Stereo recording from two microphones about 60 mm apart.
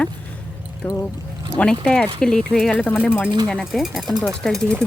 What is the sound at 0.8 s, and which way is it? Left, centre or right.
Speech, left.